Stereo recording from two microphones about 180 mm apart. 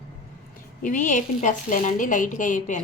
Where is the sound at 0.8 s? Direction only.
45° left (ahead or behind).